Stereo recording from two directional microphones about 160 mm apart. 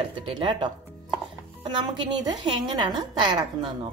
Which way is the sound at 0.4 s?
30° right (ahead or behind).